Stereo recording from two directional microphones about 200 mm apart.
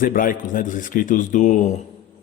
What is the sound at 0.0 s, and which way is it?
Speech, 45° left (ahead or behind).